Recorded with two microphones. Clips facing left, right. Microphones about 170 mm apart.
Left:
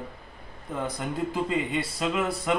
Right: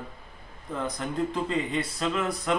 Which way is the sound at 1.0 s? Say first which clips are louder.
Right 1 dB; 10° left (ahead or behind).